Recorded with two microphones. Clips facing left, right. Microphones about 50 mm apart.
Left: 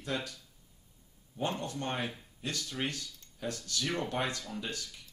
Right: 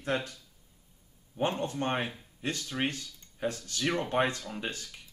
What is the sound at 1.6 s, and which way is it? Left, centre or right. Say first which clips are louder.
Speech: right 4 dB; right.